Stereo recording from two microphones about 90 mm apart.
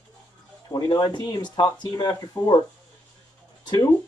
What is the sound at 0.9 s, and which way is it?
Speech, 50° left (ahead or behind).